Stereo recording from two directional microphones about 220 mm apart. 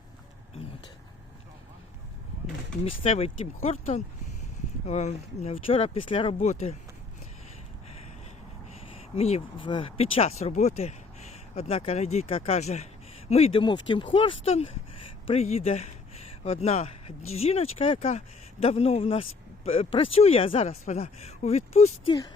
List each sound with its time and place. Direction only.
2.8 s speech: 25° left (ahead or behind)
9.1 s speech: 25° left (ahead or behind)